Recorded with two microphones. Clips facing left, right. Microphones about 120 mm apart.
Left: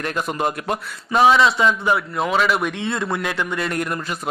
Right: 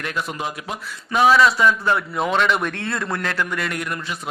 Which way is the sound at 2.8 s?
20° left (ahead or behind).